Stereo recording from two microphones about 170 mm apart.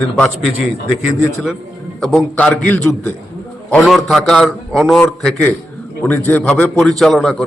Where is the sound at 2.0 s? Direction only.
5° left (ahead or behind).